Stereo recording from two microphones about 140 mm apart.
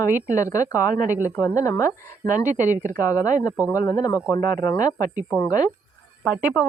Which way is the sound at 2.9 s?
25° left (ahead or behind).